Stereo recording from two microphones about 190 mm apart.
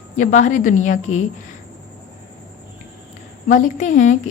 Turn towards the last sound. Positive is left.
turn(degrees=40)  # may be behind; listen again after turning